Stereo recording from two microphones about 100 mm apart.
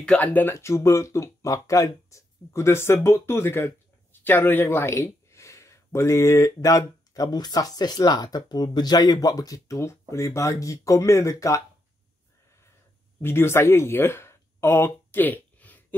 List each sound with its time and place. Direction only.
0.0 s speech: 10° left (ahead or behind); by 11.6 s 30° left (ahead or behind)
13.2 s speech: 25° left (ahead or behind)